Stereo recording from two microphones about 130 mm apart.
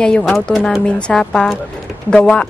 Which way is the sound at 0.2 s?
Centre (ahead or behind).